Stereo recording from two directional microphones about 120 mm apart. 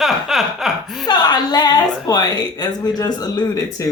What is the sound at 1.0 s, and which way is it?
A woman's voice, 35° left (ahead or behind).